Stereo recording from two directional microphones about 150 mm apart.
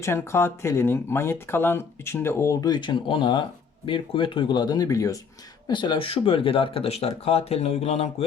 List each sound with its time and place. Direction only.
0.0 s speech: 15° left (ahead or behind); by 8.1 s 45° left (ahead or behind)